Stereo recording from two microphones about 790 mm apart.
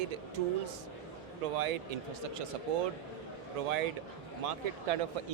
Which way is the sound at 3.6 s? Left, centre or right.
Right.